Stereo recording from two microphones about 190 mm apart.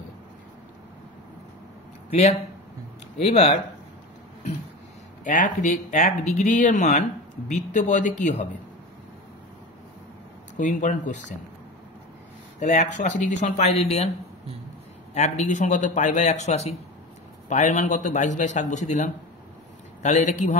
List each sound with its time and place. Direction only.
2.0 s speech: 35° left (ahead or behind)
5.2 s speech: 40° left (ahead or behind)
10.6 s speech: 40° left (ahead or behind)
12.5 s speech: 40° left (ahead or behind)
15.1 s speech: 35° left (ahead or behind)